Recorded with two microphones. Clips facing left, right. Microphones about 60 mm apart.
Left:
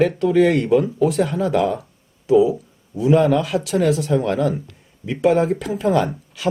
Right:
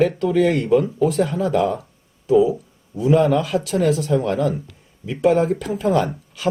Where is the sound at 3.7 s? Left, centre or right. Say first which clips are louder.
Left 1 dB; left.